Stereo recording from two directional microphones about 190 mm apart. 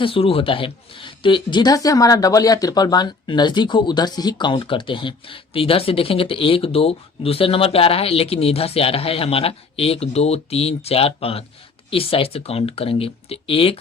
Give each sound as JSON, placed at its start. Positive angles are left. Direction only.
{"t": 0.0, "sound": "speech", "side_deg": 30}